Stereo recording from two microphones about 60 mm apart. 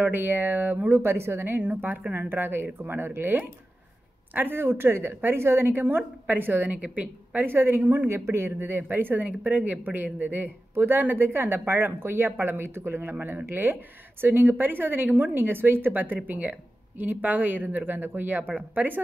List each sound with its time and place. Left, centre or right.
0.0 s a woman's voice: right
7.4 s a woman's voice: right